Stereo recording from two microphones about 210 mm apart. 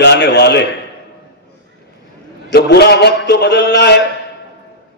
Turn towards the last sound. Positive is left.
turn(degrees=55)  # may be behind; listen again after turning